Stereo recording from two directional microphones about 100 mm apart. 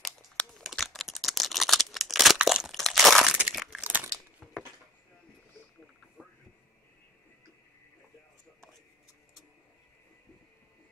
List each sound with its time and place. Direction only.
0.0 s computer keyboard: 5° left (ahead or behind)
2.8 s crumpling: centre (ahead or behind)
3.3 s a sound: 5° right (ahead or behind)
3.8 s crumpling: 15° right (ahead or behind)